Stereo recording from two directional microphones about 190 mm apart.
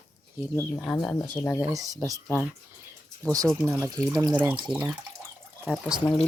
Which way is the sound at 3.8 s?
15° right (ahead or behind).